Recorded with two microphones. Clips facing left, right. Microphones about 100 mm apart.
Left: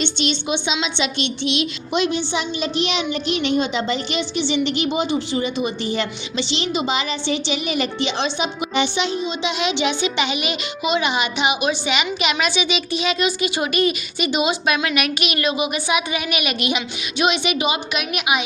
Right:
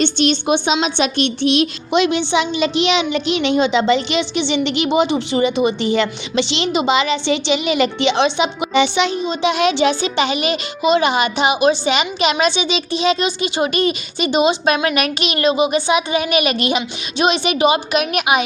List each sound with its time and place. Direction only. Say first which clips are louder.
0.0 s speech: right 6 dB; 50° right (ahead or behind)
1.9 s a woman's voice: right 4 dB; 75° right (ahead or behind)
9.2 s a child's voice: right 6 dB; 50° right (ahead or behind)